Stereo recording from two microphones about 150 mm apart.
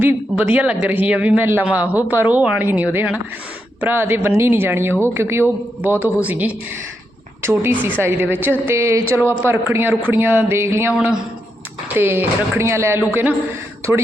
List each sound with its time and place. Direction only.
0.0 s speech: 10° right (ahead or behind)
10.9 s a man's voice: 5° right (ahead or behind)